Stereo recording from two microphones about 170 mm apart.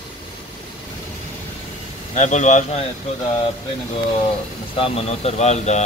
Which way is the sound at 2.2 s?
45° left (ahead or behind).